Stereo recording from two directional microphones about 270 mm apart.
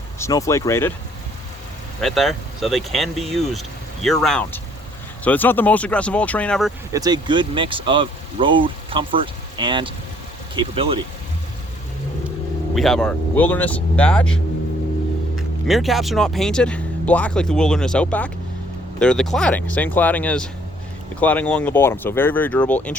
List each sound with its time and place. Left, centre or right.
0.2 s speech: centre
2.0 s speech: centre
6.9 s speech: centre
12.7 s speech: centre